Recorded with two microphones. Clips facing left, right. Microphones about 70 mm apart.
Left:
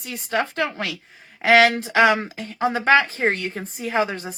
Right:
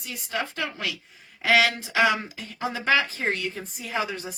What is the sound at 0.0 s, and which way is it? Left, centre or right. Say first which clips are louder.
A woman's voice: left 6 dB; left.